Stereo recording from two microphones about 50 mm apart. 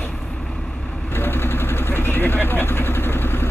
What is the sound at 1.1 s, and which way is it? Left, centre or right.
Vehicle, left.